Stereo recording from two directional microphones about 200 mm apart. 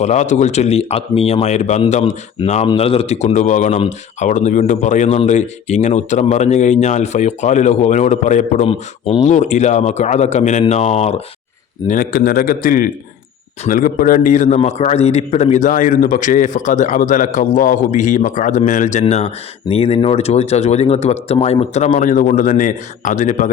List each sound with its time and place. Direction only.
0.0 s a man's voice: 35° left (ahead or behind)
11.9 s a man's voice: 45° left (ahead or behind)